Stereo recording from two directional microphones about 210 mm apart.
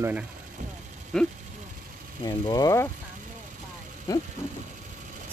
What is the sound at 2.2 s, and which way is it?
Speech, 15° left (ahead or behind).